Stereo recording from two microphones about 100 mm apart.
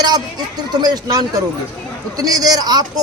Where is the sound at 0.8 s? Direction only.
40° right (ahead or behind).